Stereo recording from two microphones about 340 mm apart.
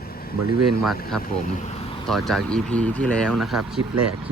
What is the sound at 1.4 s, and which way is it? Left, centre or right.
Speech, left.